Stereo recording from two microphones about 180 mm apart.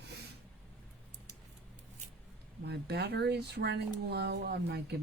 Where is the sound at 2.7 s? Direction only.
65° right (ahead or behind).